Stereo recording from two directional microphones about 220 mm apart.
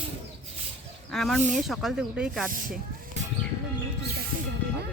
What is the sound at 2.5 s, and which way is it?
Speech, 40° right (ahead or behind).